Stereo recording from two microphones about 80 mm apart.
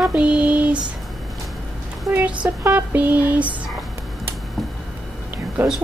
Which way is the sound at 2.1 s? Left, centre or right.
Right.